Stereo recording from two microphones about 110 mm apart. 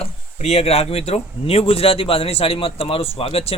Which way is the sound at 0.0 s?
65° left (ahead or behind).